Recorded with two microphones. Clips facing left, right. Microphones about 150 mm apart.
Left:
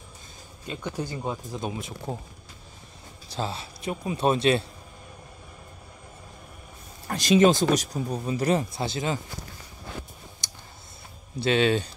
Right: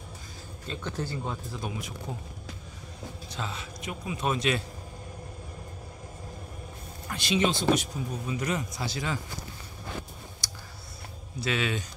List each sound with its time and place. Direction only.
0.7 s speech: 15° left (ahead or behind)
3.3 s speech: 35° left (ahead or behind)
7.1 s speech: 40° left (ahead or behind); by 9.2 s 25° left (ahead or behind)
10.4 s clicking: 20° left (ahead or behind)
11.3 s speech: 30° left (ahead or behind)